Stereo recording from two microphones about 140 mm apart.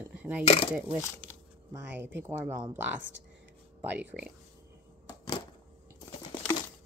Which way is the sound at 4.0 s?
10° right (ahead or behind).